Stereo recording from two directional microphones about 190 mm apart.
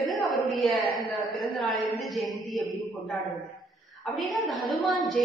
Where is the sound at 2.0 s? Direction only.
Centre (ahead or behind).